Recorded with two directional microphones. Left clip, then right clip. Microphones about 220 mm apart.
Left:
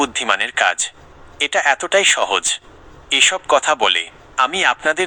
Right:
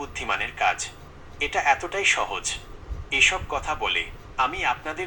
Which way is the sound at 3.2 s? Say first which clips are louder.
Left 10 dB; 45° left (ahead or behind).